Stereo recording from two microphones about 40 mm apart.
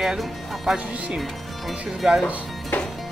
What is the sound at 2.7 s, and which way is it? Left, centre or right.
Music, left.